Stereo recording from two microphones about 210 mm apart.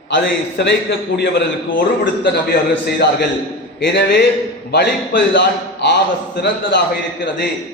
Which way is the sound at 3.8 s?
55° left (ahead or behind).